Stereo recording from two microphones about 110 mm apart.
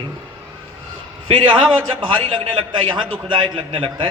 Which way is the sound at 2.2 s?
55° right (ahead or behind).